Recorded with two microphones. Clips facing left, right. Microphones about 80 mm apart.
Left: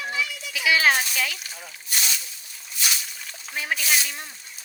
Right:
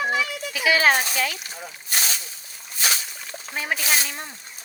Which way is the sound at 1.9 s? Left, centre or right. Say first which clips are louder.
Right 2 dB; right.